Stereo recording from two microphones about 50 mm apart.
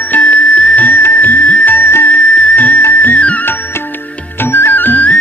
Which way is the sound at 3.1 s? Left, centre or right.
Left.